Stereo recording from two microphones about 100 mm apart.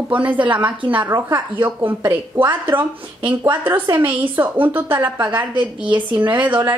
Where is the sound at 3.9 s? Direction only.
20° right (ahead or behind).